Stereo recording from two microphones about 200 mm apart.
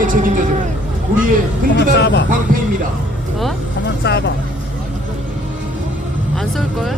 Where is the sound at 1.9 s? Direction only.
60° left (ahead or behind).